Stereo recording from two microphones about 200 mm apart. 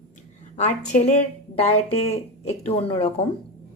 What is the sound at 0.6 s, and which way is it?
Speech, 35° left (ahead or behind).